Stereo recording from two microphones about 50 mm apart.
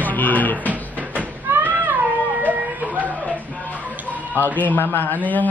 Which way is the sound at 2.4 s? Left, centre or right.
Right.